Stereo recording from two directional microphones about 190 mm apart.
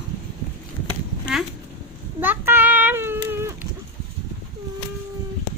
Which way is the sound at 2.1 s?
10° right (ahead or behind).